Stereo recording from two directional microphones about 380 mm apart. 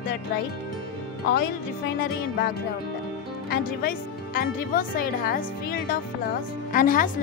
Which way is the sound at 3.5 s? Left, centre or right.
Left.